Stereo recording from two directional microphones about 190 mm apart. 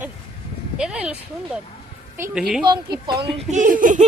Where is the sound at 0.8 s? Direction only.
5° right (ahead or behind).